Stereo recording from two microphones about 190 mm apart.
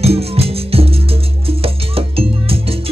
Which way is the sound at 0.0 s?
30° right (ahead or behind).